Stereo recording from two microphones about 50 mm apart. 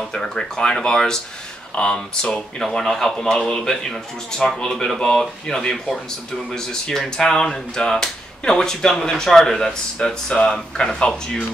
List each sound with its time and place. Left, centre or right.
0.1 s speech: centre
2.6 s speech: centre